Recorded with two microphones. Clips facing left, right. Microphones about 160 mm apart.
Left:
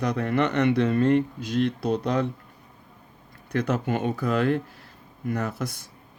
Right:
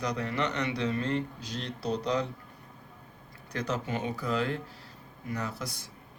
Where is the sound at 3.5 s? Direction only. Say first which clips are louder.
Left 7 dB; 55° left (ahead or behind).